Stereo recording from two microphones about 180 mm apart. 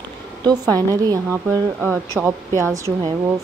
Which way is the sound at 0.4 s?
20° right (ahead or behind).